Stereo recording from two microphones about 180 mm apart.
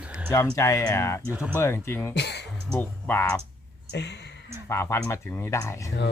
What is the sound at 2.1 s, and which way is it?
Music, 70° left (ahead or behind).